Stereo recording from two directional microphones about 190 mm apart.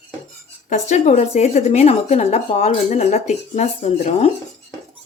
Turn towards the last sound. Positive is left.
turn(degrees=35)  # may be behind; listen again after turning